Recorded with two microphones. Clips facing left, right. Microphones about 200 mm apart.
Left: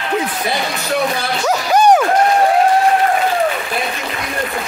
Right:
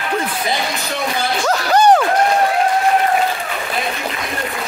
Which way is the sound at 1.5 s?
10° left (ahead or behind).